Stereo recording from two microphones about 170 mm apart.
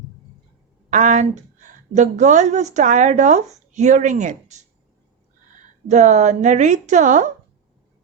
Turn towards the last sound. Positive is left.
turn(degrees=-50)  # may be behind; listen again after turning